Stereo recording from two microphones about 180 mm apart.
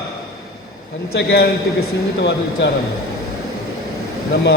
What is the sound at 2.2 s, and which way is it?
Speech, 70° left (ahead or behind).